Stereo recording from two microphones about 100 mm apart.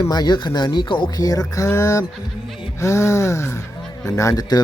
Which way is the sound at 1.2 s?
35° left (ahead or behind).